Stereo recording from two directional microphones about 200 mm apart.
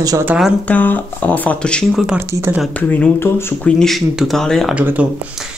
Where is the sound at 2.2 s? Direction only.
10° right (ahead or behind).